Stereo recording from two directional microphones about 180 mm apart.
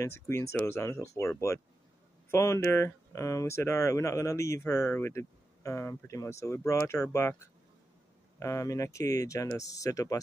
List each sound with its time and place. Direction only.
0.0 s speech: 15° left (ahead or behind)
2.3 s speech: 15° left (ahead or behind)